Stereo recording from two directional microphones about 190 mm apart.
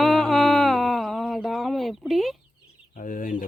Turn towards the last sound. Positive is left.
turn(degrees=45)  # may be behind; listen again after turning